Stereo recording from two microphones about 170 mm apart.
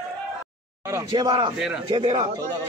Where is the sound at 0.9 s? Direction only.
20° right (ahead or behind).